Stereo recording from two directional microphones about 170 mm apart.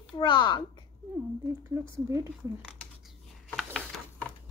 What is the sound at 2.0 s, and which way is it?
Speech, 20° right (ahead or behind).